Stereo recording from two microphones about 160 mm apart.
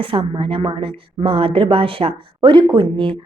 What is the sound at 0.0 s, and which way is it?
A woman's voice, 35° right (ahead or behind).